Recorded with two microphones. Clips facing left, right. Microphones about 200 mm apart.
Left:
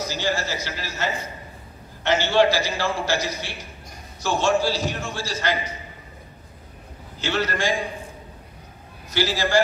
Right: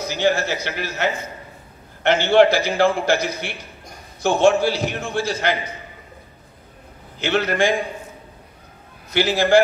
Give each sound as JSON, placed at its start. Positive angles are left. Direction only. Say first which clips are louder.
{"t": 0.0, "sound": "a man's voice", "louder": "right 6 dB", "side_deg": -60}
{"t": 7.2, "sound": "a man's voice", "louder": "right 5 dB", "side_deg": -60}
{"t": 9.1, "sound": "a man's voice", "louder": "right 6 dB", "side_deg": -55}